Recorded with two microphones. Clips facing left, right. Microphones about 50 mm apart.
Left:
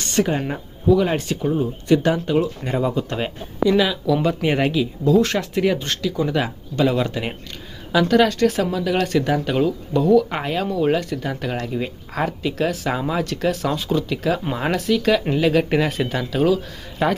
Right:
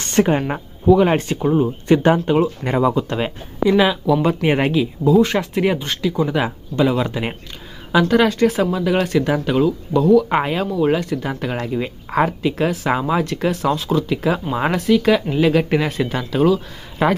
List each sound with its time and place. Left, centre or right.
0.0 s speech: right
2.9 s speech: centre
5.4 s speech: right
10.2 s speech: centre
14.2 s speech: centre